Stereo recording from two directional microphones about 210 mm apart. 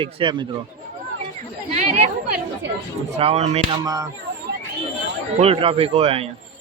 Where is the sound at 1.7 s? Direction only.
30° right (ahead or behind).